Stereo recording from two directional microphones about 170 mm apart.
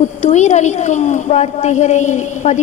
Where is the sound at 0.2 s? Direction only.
40° left (ahead or behind).